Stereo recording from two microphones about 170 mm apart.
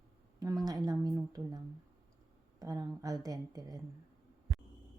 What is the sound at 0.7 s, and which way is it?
Speech, 20° right (ahead or behind).